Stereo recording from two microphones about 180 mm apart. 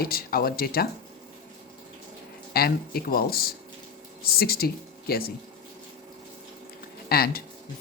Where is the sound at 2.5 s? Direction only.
55° left (ahead or behind).